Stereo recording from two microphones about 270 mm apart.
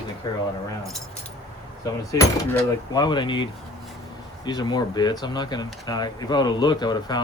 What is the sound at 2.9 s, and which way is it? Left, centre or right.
Speech, centre.